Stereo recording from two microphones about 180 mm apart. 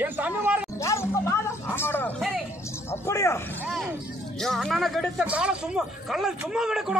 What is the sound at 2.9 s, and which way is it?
Speech, 15° left (ahead or behind).